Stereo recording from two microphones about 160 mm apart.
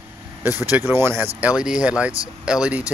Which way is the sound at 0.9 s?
15° right (ahead or behind).